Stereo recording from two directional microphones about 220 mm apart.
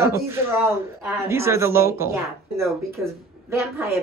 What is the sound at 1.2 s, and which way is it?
Speech, 10° right (ahead or behind).